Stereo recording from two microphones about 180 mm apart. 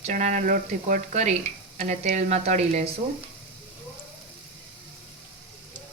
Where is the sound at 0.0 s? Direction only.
40° right (ahead or behind).